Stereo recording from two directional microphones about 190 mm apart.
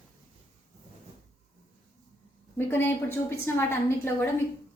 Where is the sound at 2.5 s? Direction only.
10° left (ahead or behind).